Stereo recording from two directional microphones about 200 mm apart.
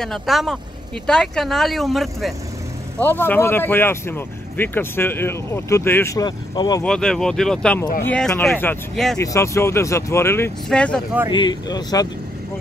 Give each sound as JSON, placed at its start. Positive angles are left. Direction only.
{"t": 0.0, "sound": "speech", "side_deg": 0}
{"t": 6.8, "sound": "speech", "side_deg": 5}
{"t": 9.2, "sound": "speech", "side_deg": 15}
{"t": 11.3, "sound": "speech", "side_deg": 20}